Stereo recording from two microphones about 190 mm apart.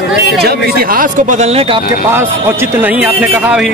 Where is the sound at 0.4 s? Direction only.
55° right (ahead or behind); by 1.8 s 30° right (ahead or behind).